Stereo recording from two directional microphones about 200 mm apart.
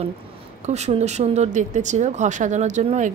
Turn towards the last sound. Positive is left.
turn(degrees=-35)  # may be behind; listen again after turning